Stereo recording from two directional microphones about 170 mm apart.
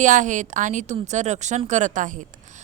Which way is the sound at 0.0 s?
45° right (ahead or behind).